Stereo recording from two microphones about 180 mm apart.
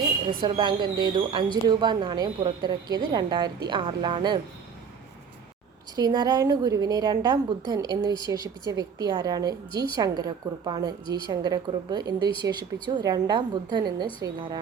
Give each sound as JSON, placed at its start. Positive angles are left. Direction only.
{"t": 0.3, "sound": "a woman's voice", "side_deg": -30}
{"t": 6.0, "sound": "a woman's voice", "side_deg": -20}